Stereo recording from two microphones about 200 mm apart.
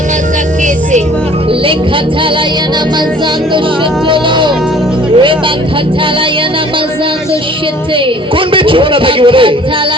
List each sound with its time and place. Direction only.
4.1 s a sound: 25° right (ahead or behind)
5.1 s music: 25° right (ahead or behind)
8.5 s a man's voice: 25° right (ahead or behind)